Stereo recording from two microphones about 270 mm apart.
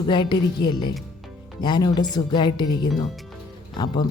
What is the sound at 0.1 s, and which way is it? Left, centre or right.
Speech, centre.